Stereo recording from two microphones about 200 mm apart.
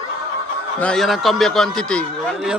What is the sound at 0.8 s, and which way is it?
A man's voice, 5° left (ahead or behind).